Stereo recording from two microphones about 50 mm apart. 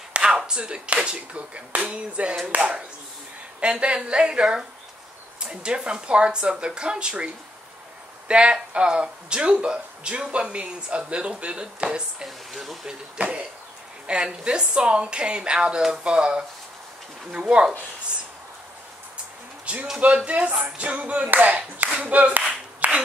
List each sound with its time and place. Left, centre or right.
0.1 s a sound: right
0.4 s a woman's voice: centre
12.3 s speech: centre
12.8 s a woman's voice: right
19.6 s a sound: right
20.2 s speech: right
22.5 s clapping: right